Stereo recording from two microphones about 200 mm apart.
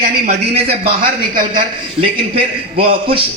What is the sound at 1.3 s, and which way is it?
Speech, 40° right (ahead or behind).